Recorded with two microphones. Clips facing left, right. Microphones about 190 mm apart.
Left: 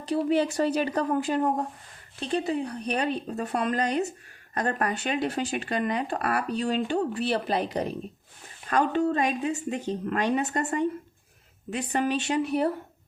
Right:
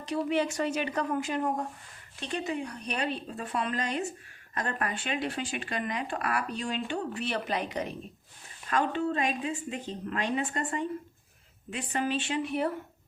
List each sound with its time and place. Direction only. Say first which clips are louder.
0.0 s a woman's voice: left 4 dB; 35° left (ahead or behind)